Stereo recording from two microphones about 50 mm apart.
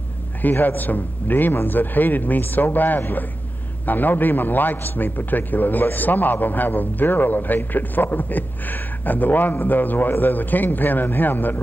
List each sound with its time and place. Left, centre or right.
0.4 s a man's voice: left